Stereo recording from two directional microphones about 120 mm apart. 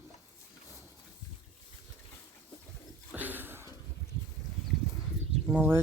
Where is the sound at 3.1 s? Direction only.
15° right (ahead or behind).